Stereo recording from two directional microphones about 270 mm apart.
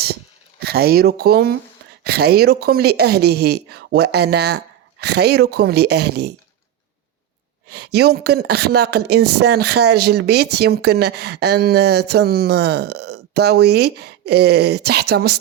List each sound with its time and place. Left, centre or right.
0.6 s speech: right
7.7 s speech: right